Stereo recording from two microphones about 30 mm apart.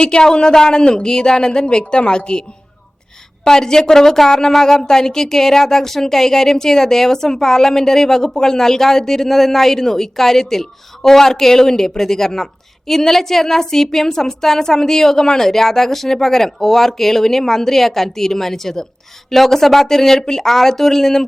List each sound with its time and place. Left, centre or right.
0.0 s speech: left
3.4 s a woman's voice: centre